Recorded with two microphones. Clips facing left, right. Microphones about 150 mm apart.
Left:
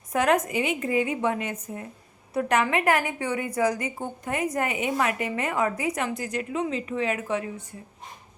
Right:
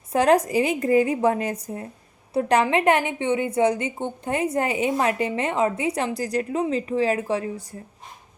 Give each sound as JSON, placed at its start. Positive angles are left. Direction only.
{"t": 0.1, "sound": "a woman's voice", "side_deg": -30}